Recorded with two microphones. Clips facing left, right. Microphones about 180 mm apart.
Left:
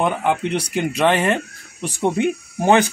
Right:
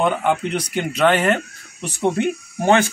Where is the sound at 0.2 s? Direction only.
5° left (ahead or behind).